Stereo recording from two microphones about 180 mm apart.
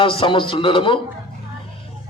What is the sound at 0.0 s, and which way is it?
Speech, 30° left (ahead or behind).